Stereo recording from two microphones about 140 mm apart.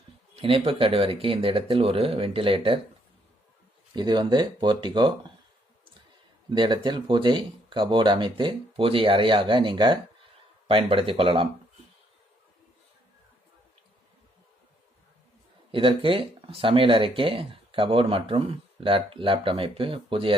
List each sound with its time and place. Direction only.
0.3 s speech: 40° right (ahead or behind)
3.9 s speech: 30° right (ahead or behind)
6.5 s speech: 35° right (ahead or behind)
15.7 s speech: 40° right (ahead or behind)